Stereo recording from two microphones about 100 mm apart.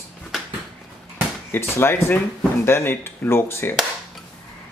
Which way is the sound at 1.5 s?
25° left (ahead or behind).